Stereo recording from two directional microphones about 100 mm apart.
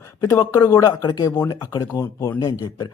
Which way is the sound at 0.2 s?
30° left (ahead or behind).